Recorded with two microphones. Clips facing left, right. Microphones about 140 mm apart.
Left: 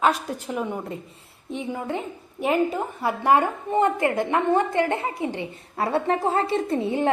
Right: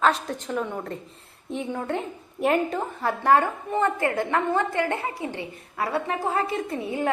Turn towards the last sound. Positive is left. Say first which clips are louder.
# left 4 dB
turn(degrees=25)  # may be behind; listen again after turning